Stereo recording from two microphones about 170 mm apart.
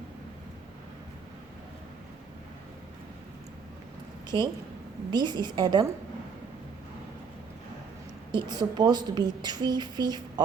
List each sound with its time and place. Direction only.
4.3 s a woman's voice: 30° right (ahead or behind)
8.3 s a woman's voice: 25° right (ahead or behind)